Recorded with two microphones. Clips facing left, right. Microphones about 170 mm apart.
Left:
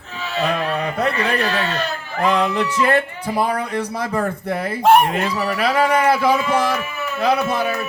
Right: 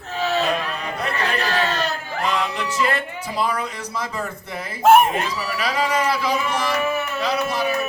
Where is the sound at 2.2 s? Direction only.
55° left (ahead or behind).